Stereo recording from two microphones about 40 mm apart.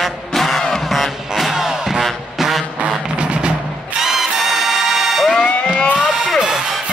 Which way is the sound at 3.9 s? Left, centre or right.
Centre.